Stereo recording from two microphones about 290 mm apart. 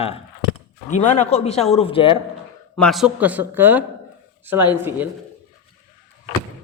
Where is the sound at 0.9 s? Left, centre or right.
Left.